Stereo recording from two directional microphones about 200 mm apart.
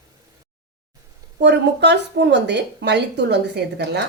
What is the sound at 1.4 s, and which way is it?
A woman's voice, 60° right (ahead or behind).